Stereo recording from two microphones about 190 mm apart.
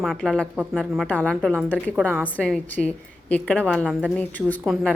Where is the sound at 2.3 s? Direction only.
5° left (ahead or behind).